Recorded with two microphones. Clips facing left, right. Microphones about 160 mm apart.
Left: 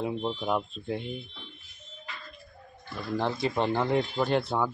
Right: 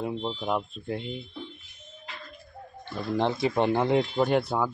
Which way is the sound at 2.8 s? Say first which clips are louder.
Right 3 dB; 20° right (ahead or behind).